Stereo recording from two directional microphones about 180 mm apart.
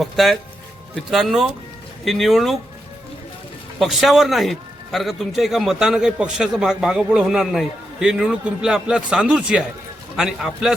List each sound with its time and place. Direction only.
0.0 s a man's voice: centre (ahead or behind)
3.8 s a man's voice: centre (ahead or behind)